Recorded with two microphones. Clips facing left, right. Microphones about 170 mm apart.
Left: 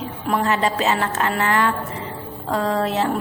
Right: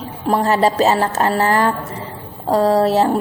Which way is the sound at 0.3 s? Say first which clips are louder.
Right 5 dB; 35° right (ahead or behind).